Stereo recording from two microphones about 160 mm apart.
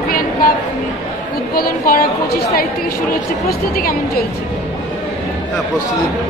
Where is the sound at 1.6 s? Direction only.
65° left (ahead or behind).